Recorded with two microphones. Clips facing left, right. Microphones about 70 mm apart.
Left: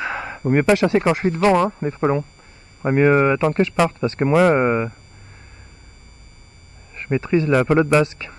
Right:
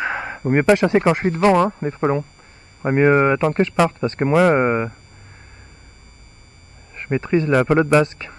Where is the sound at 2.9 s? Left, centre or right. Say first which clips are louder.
Even; right.